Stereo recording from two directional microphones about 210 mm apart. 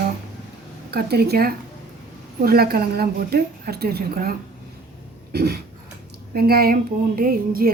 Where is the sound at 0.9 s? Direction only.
50° right (ahead or behind).